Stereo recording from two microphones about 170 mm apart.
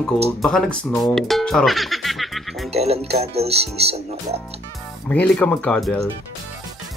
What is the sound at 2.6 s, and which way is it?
Speech, 35° right (ahead or behind).